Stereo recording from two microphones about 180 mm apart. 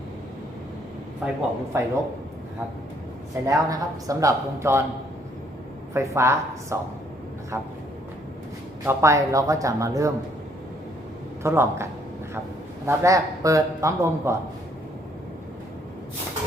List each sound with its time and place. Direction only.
1.2 s a man's voice: 5° right (ahead or behind)
3.4 s a man's voice: 20° right (ahead or behind)
5.9 s a man's voice: 15° right (ahead or behind)
8.9 s a man's voice: 15° right (ahead or behind)
11.4 s a man's voice: 15° right (ahead or behind)